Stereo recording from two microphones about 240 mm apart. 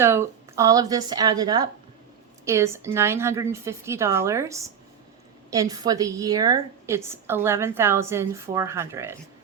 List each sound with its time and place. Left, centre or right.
0.0 s a woman's voice: centre